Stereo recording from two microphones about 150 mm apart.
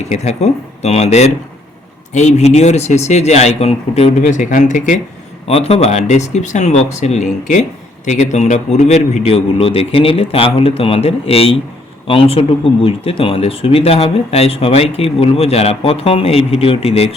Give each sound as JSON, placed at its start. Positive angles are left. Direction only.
{"t": 0.0, "sound": "speech", "side_deg": 50}
{"t": 5.5, "sound": "speech", "side_deg": 40}